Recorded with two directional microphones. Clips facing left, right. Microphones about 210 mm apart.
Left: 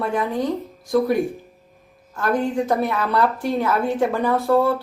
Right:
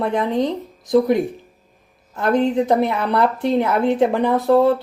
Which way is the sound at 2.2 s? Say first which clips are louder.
Right 4 dB; 20° right (ahead or behind).